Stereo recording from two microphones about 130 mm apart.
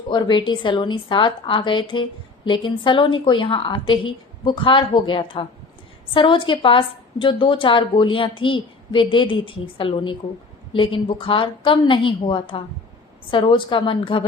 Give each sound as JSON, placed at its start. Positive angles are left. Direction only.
{"t": 0.1, "sound": "a woman's voice", "side_deg": 35}